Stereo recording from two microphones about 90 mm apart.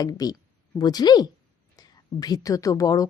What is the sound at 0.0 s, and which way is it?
A woman's voice, 45° left (ahead or behind).